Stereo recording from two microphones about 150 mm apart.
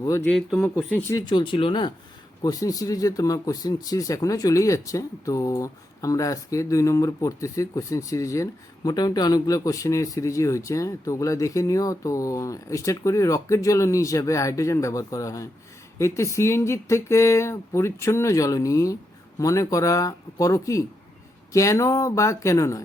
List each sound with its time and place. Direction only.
0.0 s a man's voice: 20° left (ahead or behind)
0.3 s speech: 10° left (ahead or behind)
1.1 s speech: 30° left (ahead or behind)
2.4 s a man's voice: 25° left (ahead or behind)